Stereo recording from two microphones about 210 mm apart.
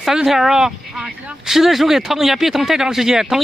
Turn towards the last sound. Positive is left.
turn(degrees=0)  # may be behind; listen again after turning